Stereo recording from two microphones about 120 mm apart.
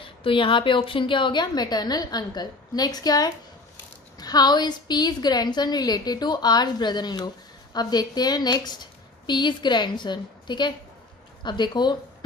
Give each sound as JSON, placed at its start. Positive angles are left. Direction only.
{"t": 0.0, "sound": "a woman's voice", "side_deg": 45}